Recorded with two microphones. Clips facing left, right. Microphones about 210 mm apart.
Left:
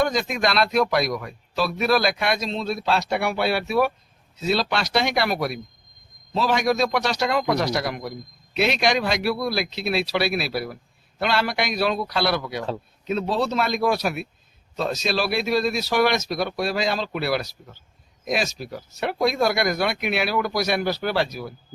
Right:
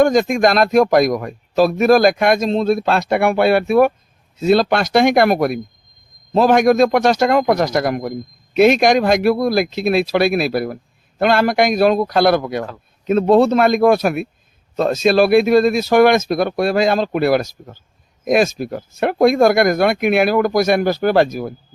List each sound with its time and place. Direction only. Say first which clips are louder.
0.0 s speech: right 9 dB; 50° right (ahead or behind)